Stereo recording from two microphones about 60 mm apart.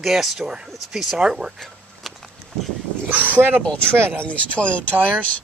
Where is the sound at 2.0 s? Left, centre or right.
Centre.